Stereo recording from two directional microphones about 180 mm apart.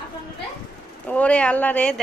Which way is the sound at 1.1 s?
5° left (ahead or behind).